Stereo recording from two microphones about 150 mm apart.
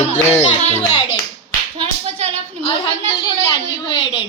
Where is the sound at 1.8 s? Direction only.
40° right (ahead or behind).